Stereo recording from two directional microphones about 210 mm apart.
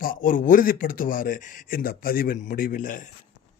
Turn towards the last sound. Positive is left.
turn(degrees=40)  # may be behind; listen again after turning